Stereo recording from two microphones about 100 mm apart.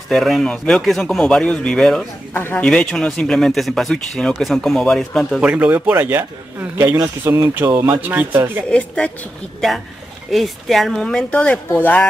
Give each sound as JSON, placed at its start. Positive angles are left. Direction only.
{"t": 0.1, "sound": "a man's voice", "side_deg": 0}
{"t": 2.3, "sound": "a man's voice", "side_deg": 20}
{"t": 5.4, "sound": "speech", "side_deg": -15}
{"t": 7.2, "sound": "speech", "side_deg": -30}
{"t": 8.6, "sound": "a man's voice", "side_deg": 10}